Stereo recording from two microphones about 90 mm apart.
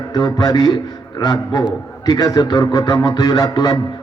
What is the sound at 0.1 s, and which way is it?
A man's voice, 45° left (ahead or behind).